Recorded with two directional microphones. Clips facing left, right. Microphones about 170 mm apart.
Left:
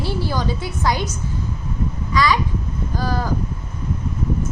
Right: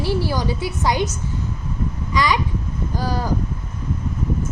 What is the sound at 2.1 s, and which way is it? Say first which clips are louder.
Speech: left 1 dB; 15° right (ahead or behind).